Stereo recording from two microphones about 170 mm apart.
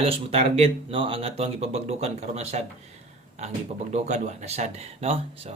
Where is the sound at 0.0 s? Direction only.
35° right (ahead or behind).